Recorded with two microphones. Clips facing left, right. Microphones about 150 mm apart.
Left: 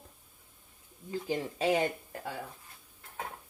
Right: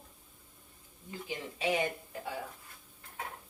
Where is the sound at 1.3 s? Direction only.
40° left (ahead or behind).